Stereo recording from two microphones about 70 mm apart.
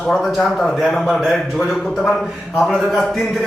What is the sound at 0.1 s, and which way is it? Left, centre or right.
A man's voice, centre.